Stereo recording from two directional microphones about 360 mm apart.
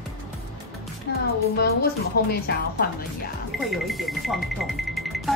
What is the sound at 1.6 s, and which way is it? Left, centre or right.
Speech, left.